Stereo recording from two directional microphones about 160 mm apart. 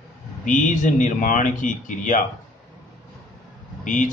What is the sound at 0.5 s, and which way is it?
Speech, 50° left (ahead or behind).